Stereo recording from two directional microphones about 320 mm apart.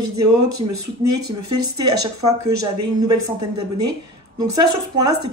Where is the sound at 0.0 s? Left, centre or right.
Right.